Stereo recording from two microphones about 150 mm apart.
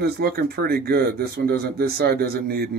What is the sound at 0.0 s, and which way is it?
Speech, 90° right.